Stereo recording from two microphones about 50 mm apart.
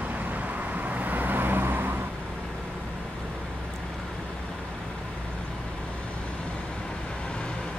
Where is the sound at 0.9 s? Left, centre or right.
Right.